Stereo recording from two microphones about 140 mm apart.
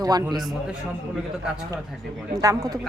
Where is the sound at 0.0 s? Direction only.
25° right (ahead or behind).